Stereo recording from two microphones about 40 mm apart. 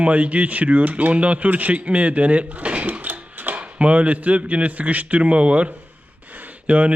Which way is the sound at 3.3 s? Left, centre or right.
Right.